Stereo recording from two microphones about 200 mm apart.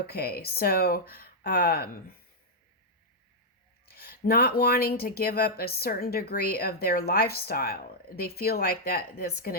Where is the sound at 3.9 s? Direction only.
50° left (ahead or behind).